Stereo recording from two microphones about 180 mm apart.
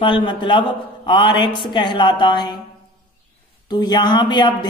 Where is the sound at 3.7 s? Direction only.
25° left (ahead or behind).